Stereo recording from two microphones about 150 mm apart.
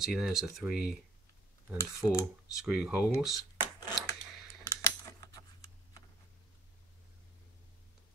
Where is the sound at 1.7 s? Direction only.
20° left (ahead or behind).